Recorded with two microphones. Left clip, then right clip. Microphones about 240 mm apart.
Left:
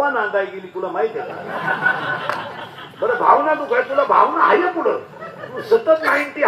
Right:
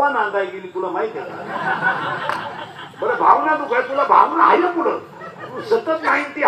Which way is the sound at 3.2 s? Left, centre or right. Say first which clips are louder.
Even; right.